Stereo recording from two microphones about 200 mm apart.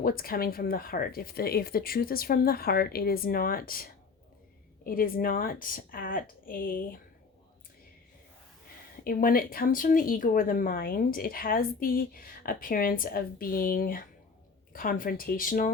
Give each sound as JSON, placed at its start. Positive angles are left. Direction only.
{"t": 0.0, "sound": "speech", "side_deg": 45}
{"t": 9.0, "sound": "speech", "side_deg": 45}